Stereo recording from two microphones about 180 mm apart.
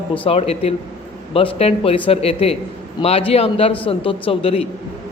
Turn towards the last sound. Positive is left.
turn(degrees=30)  # may be behind; listen again after turning